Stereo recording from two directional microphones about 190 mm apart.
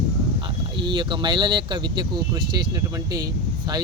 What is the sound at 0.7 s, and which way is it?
Speech, 25° right (ahead or behind).